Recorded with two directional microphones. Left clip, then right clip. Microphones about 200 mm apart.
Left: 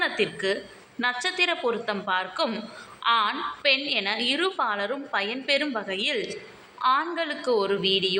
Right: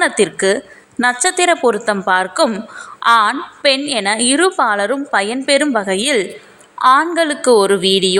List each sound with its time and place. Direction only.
0.2 s a woman's voice: 55° right (ahead or behind)